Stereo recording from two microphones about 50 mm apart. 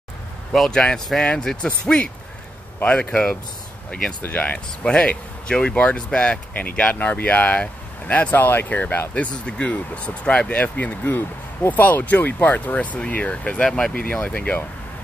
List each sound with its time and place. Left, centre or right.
0.5 s speech: centre
2.8 s speech: left
4.8 s speech: left
9.1 s speech: left
13.7 s speech: centre
14.0 s speech: left